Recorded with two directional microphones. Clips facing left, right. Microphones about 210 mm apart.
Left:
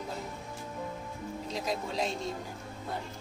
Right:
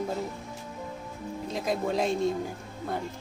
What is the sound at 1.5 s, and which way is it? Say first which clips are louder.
Speech: right 6 dB; 50° right (ahead or behind).